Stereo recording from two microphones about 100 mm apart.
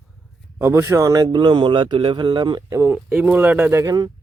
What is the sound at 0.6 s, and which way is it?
Speech, 25° right (ahead or behind).